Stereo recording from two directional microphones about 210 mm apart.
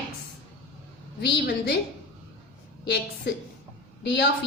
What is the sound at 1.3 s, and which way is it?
Speech, 50° left (ahead or behind).